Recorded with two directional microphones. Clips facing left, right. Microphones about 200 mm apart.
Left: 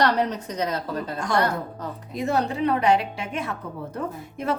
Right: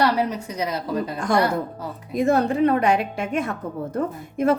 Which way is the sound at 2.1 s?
50° right (ahead or behind).